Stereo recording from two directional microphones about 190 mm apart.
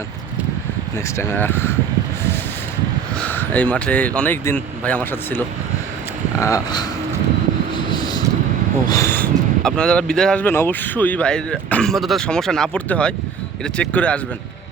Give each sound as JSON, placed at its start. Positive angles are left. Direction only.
{"t": 0.9, "sound": "speech", "side_deg": 15}
{"t": 3.2, "sound": "speech", "side_deg": 10}
{"t": 6.4, "sound": "speech", "side_deg": 20}
{"t": 7.9, "sound": "vehicle", "side_deg": 20}
{"t": 8.9, "sound": "speech", "side_deg": 15}